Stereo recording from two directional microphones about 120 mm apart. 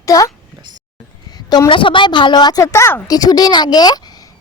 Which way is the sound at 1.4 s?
35° left (ahead or behind).